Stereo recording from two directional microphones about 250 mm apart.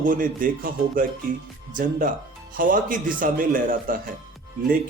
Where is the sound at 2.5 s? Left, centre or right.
Right.